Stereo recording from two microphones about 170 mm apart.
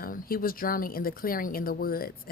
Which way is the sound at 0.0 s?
60° left (ahead or behind).